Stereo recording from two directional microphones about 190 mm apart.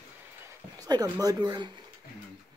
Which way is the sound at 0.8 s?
20° right (ahead or behind).